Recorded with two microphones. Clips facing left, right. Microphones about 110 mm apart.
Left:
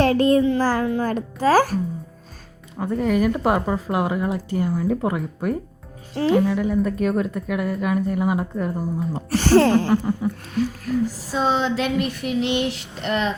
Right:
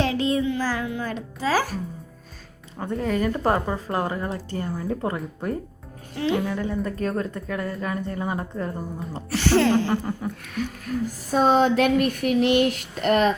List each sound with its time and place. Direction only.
0.0 s child singing: 50° left (ahead or behind)
0.4 s a child's voice: 40° left (ahead or behind)
2.7 s speech: 5° left (ahead or behind)
6.1 s a sound: 40° left (ahead or behind)
6.4 s speech: 5° left (ahead or behind)
9.3 s a child's voice: 45° left (ahead or behind)
9.9 s speech: 5° left (ahead or behind)
10.4 s a sound: 35° left (ahead or behind)
11.0 s speech: 50° right (ahead or behind)